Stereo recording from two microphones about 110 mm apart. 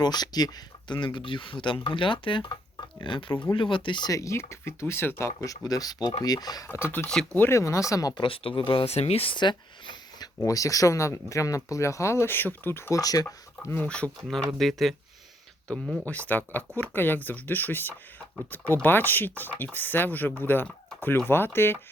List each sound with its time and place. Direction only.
0.0 s speech: 40° left (ahead or behind)
4.1 s speech: 30° left (ahead or behind)
5.4 s speech: 30° left (ahead or behind)
7.3 s speech: 25° left (ahead or behind)
8.1 s speech: 50° left (ahead or behind)
10.4 s speech: 30° left (ahead or behind)
13.0 s speech: 35° left (ahead or behind)
13.8 s speech: 10° left (ahead or behind)
16.0 s speech: 15° left (ahead or behind)